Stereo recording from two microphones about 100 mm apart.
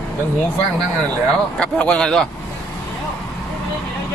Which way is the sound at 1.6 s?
10° left (ahead or behind).